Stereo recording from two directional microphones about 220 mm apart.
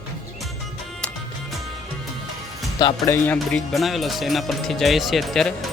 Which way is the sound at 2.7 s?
15° left (ahead or behind).